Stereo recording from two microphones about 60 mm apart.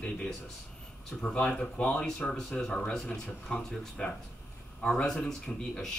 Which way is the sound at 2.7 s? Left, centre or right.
Centre.